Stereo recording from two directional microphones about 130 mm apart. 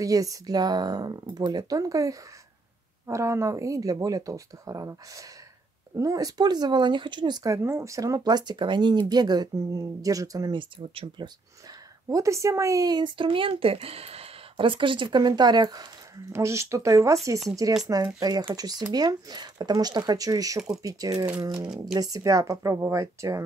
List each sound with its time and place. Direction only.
0.0 s speech: 25° right (ahead or behind)
12.1 s speech: 25° right (ahead or behind)
16.3 s speech: 20° right (ahead or behind)